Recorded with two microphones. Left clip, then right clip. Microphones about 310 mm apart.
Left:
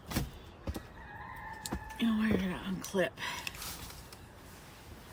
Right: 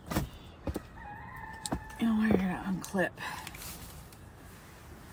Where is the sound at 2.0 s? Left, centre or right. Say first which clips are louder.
Right 3 dB; centre.